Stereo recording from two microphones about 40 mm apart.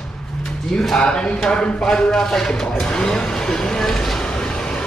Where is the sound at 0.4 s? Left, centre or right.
Centre.